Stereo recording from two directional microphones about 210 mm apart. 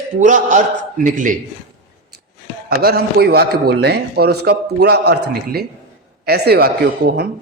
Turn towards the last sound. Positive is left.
turn(degrees=-50)  # may be behind; listen again after turning